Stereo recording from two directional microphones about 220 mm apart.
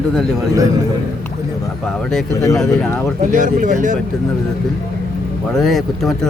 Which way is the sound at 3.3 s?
35° right (ahead or behind).